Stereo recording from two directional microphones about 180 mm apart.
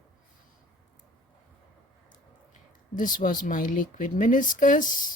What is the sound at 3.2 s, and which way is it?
Speech, 50° left (ahead or behind).